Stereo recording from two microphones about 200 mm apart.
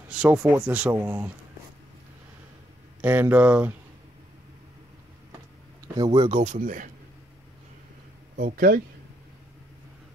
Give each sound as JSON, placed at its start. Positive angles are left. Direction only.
{"t": 0.1, "sound": "speech", "side_deg": -5}
{"t": 3.0, "sound": "speech", "side_deg": -10}
{"t": 5.9, "sound": "speech", "side_deg": -25}
{"t": 8.4, "sound": "speech", "side_deg": -45}